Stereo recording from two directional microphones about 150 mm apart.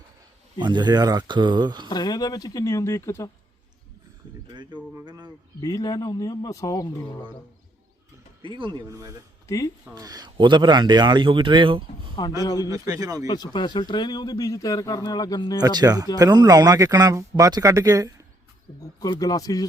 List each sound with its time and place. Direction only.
0.6 s speech: 30° right (ahead or behind)
1.9 s speech: 25° left (ahead or behind)
5.0 s speech: 30° right (ahead or behind)
5.5 s speech: 25° left (ahead or behind)
8.4 s speech: 35° right (ahead or behind)
12.4 s speech: 25° left (ahead or behind)
12.6 s speech: 25° right (ahead or behind)
13.2 s speech: 25° left (ahead or behind)
15.6 s speech: 25° right (ahead or behind)
18.9 s speech: 25° left (ahead or behind)